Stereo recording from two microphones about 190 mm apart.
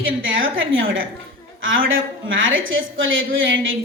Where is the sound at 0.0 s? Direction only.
90° right.